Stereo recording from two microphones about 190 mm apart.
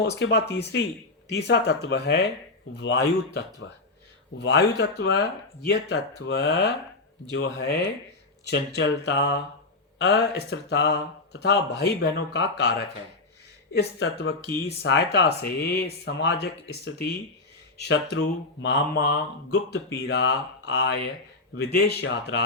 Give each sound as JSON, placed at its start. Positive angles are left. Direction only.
{"t": 0.2, "sound": "speech", "side_deg": 60}